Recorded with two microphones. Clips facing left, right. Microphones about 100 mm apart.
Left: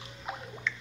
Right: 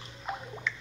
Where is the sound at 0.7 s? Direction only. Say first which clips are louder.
Even; 5° right (ahead or behind).